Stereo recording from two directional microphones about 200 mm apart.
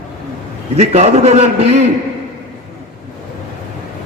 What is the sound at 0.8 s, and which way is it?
A man's voice, 30° right (ahead or behind).